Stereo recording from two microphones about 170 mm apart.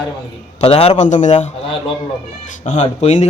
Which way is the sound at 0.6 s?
35° left (ahead or behind).